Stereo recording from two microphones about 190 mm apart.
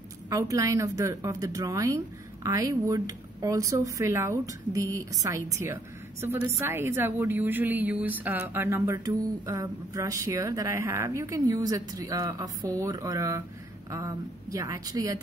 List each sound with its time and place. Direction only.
0.3 s a woman's voice: 15° right (ahead or behind)